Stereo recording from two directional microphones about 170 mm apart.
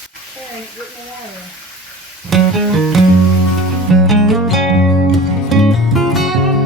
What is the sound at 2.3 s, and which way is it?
Music, centre (ahead or behind).